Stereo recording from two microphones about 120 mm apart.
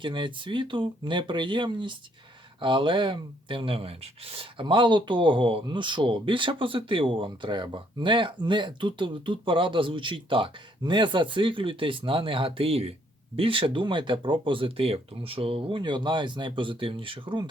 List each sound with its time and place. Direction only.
0.0 s speech: 45° right (ahead or behind)